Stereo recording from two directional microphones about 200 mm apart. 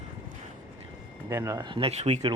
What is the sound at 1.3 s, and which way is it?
Speech, 15° right (ahead or behind).